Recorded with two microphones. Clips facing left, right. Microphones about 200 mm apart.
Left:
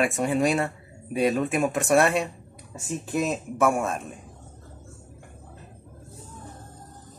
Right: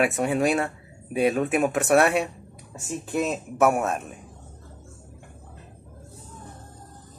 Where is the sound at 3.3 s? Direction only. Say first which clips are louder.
Right 3 dB; 5° right (ahead or behind).